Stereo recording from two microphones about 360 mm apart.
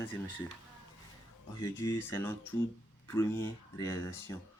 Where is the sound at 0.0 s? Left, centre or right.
Centre.